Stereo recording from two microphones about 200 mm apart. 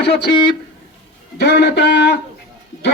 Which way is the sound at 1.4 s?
60° left (ahead or behind).